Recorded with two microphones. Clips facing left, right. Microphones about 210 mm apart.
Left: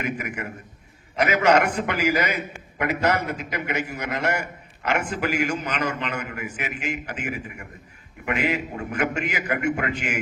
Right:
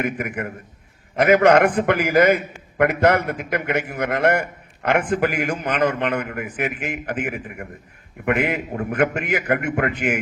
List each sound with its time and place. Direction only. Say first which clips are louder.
0.0 s a man's voice: right 4 dB; 55° right (ahead or behind)